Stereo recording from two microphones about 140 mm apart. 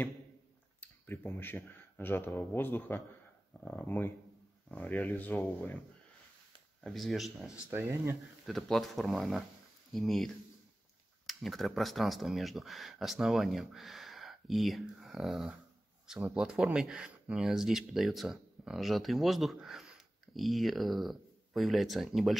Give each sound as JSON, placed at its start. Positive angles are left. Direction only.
{"t": 0.7, "sound": "speech", "side_deg": 15}
{"t": 6.8, "sound": "speech", "side_deg": 0}
{"t": 7.7, "sound": "speech", "side_deg": -15}
{"t": 8.1, "sound": "speech", "side_deg": 0}